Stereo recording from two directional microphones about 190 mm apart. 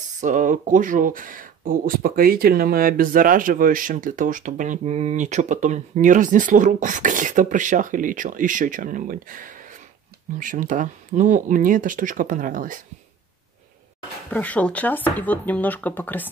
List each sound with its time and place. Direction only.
0.2 s speech: 40° right (ahead or behind)
14.3 s speech: 5° left (ahead or behind)